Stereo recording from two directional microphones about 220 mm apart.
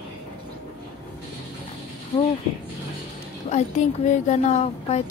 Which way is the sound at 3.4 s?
30° left (ahead or behind).